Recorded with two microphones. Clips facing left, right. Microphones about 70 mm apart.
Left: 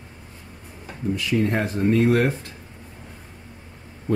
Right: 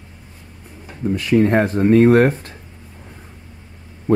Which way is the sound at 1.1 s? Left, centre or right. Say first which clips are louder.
Right 7 dB; right.